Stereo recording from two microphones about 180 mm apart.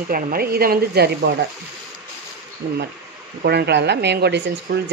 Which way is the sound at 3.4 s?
65° right (ahead or behind).